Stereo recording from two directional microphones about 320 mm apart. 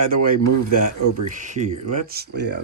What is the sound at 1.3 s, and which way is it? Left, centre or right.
Speech, right.